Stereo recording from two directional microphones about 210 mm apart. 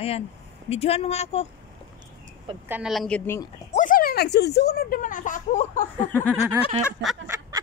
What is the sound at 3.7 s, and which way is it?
Speech, 40° left (ahead or behind).